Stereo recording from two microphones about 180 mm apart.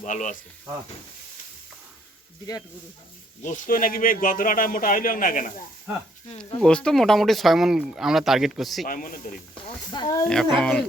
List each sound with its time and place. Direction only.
0.0 s a man's voice: 45° left (ahead or behind)
3.4 s a man's voice: 45° left (ahead or behind)
6.6 s speech: 5° left (ahead or behind)
8.9 s a man's voice: 50° left (ahead or behind)
9.9 s speech: 25° left (ahead or behind)
10.2 s speech: 5° left (ahead or behind)